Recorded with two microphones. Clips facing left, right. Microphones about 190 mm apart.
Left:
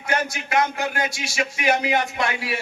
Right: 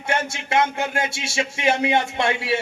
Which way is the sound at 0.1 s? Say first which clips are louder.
Right 1 dB; 25° right (ahead or behind).